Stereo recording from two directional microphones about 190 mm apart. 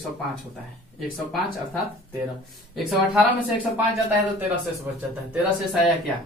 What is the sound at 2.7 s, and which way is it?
Speech, centre (ahead or behind).